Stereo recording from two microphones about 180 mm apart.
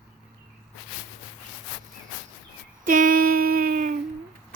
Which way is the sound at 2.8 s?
50° right (ahead or behind).